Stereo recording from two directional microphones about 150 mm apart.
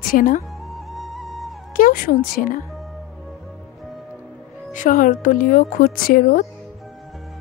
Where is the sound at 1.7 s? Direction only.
70° left (ahead or behind).